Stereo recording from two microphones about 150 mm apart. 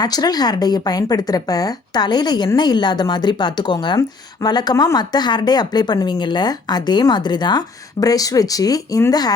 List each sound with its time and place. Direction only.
0.0 s speech: 25° left (ahead or behind)